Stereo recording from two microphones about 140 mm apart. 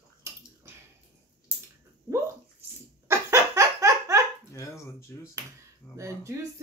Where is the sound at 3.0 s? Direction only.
20° right (ahead or behind).